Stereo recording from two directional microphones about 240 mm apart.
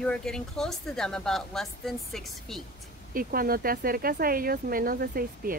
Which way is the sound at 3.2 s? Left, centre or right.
Right.